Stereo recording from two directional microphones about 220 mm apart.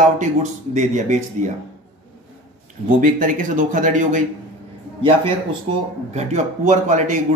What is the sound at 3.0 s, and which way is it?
Speech, 35° right (ahead or behind).